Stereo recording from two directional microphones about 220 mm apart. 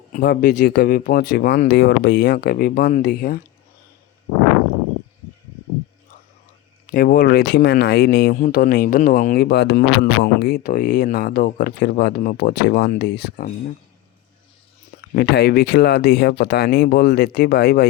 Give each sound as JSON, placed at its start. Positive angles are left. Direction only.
{"t": 0.2, "sound": "speech", "side_deg": 50}
{"t": 6.8, "sound": "speech", "side_deg": 40}
{"t": 15.1, "sound": "speech", "side_deg": 50}